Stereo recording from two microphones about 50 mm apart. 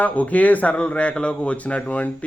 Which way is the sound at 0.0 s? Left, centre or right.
Left.